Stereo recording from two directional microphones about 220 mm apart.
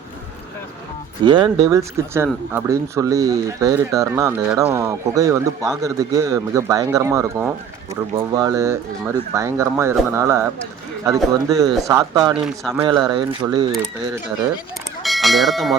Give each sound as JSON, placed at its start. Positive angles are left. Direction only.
{"t": 1.2, "sound": "speech", "side_deg": -20}
{"t": 12.3, "sound": "speech", "side_deg": -5}
{"t": 12.8, "sound": "speech", "side_deg": -20}
{"t": 15.0, "sound": "bell", "side_deg": 0}